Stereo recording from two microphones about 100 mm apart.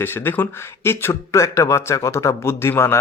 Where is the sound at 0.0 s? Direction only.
20° left (ahead or behind).